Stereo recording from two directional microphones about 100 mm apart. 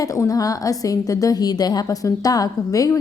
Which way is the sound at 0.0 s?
35° left (ahead or behind).